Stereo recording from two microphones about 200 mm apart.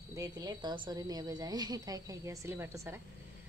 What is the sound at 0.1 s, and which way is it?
A woman's voice, 20° right (ahead or behind).